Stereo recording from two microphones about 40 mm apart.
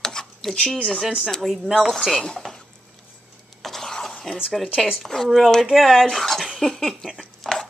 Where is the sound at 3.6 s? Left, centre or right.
Centre.